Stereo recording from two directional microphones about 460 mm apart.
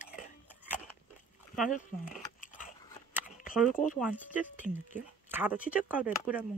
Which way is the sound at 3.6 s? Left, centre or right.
Centre.